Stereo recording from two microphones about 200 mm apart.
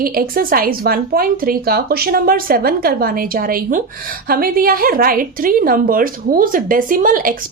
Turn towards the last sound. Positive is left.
turn(degrees=-45)  # may be behind; listen again after turning